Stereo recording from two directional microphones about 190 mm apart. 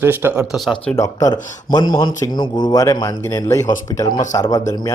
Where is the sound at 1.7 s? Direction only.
25° left (ahead or behind).